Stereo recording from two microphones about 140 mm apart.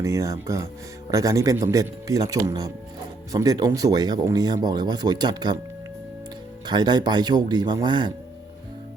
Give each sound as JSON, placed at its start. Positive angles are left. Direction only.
{"t": 0.0, "sound": "speech", "side_deg": -25}
{"t": 6.7, "sound": "speech", "side_deg": -30}